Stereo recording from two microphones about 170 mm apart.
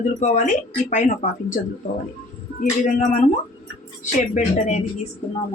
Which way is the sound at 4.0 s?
45° left (ahead or behind).